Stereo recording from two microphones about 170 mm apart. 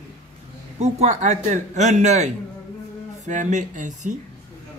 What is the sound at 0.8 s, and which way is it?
A man's voice, 40° right (ahead or behind).